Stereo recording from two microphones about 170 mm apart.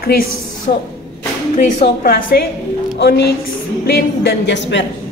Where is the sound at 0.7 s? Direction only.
50° left (ahead or behind).